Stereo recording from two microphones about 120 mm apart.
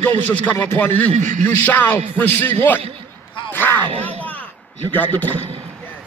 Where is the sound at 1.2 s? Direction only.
90° right.